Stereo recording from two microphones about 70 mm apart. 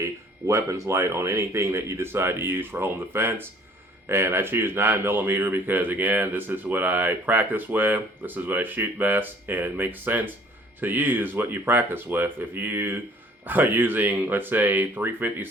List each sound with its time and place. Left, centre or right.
0.0 s speech: right